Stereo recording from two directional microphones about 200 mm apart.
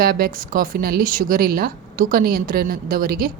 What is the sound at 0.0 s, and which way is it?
Speech, 45° right (ahead or behind).